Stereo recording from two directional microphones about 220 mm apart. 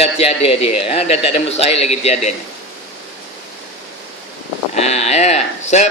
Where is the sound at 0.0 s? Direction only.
25° left (ahead or behind).